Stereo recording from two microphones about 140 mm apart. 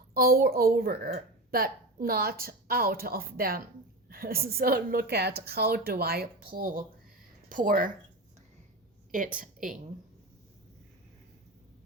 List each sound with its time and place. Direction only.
0.1 s a child's voice: 90° right
7.5 s speech: 75° right (ahead or behind)
9.1 s a woman's voice: 75° right (ahead or behind)